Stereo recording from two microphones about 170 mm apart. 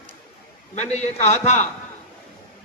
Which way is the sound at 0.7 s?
40° left (ahead or behind).